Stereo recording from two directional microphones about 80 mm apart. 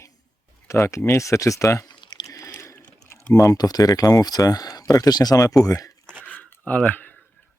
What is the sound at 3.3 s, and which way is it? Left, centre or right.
Speech, left.